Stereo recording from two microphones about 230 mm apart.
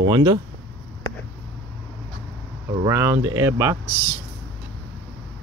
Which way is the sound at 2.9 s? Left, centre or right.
Centre.